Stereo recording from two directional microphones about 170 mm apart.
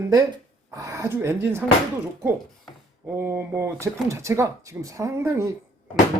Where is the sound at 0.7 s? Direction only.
20° right (ahead or behind).